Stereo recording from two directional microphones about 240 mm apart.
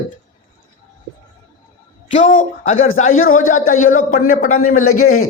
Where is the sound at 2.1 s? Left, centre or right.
Left.